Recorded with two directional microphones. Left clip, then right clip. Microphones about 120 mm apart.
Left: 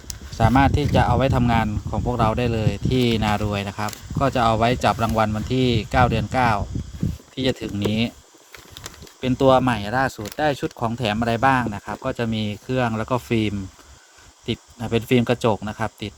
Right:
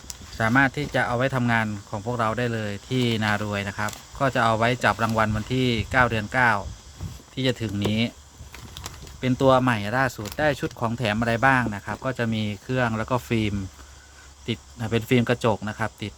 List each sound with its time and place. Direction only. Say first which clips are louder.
0.3 s speech: left 3 dB; 20° left (ahead or behind)